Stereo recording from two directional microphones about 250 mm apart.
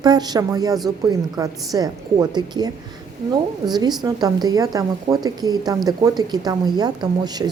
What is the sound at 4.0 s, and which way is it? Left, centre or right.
A woman's voice, centre.